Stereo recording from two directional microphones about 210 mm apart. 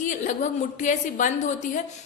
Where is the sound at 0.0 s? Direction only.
35° left (ahead or behind).